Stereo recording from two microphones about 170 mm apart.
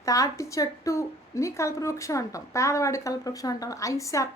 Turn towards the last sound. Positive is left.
turn(degrees=20)  # may be behind; listen again after turning